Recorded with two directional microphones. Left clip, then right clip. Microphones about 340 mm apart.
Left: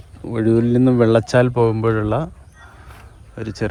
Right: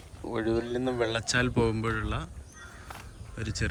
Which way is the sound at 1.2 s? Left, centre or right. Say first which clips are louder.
Left 12 dB; centre.